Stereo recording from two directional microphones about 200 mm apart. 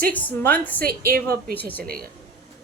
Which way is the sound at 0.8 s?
50° right (ahead or behind).